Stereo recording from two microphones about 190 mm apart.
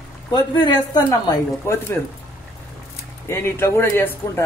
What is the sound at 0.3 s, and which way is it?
Speech, 20° left (ahead or behind).